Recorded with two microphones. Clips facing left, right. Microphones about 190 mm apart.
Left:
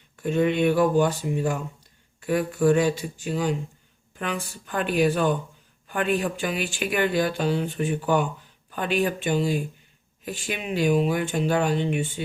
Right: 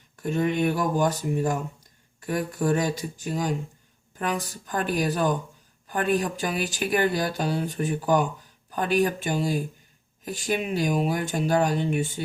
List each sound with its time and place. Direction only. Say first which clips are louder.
0.3 s speech: left 3 dB; 45° right (ahead or behind)